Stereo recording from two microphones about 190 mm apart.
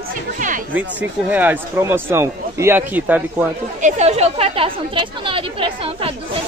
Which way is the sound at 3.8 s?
40° right (ahead or behind).